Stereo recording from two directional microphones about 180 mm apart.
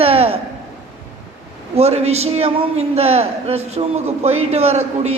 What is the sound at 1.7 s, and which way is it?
A man's voice, 35° right (ahead or behind).